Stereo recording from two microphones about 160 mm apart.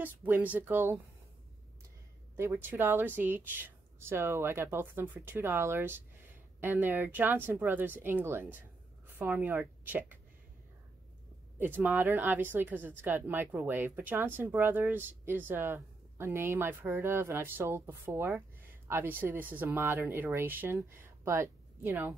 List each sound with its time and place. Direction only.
0.0 s a woman's voice: 10° right (ahead or behind)
2.3 s a woman's voice: 15° right (ahead or behind)
11.5 s a woman's voice: 15° right (ahead or behind)